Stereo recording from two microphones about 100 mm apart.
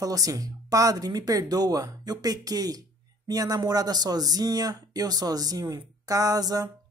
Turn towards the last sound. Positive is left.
turn(degrees=-40)  # may be behind; listen again after turning